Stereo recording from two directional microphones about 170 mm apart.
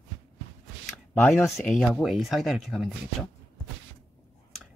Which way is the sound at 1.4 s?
Centre (ahead or behind).